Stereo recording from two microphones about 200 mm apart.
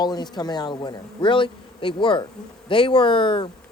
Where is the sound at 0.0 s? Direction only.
20° left (ahead or behind).